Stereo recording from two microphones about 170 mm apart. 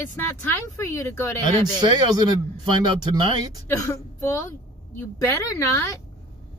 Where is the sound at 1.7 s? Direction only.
25° right (ahead or behind).